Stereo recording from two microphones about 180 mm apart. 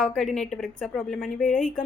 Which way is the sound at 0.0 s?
5° left (ahead or behind).